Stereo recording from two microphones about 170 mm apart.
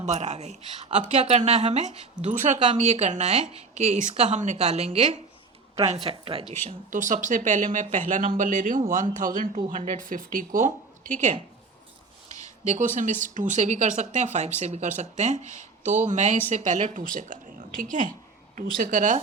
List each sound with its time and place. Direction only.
0.0 s speech: 40° right (ahead or behind)
6.7 s speech: 50° right (ahead or behind)
9.6 s speech: 25° right (ahead or behind)
10.0 s speech: 50° right (ahead or behind)